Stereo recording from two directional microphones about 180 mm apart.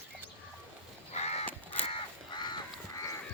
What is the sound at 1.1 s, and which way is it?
Crow, 35° left (ahead or behind).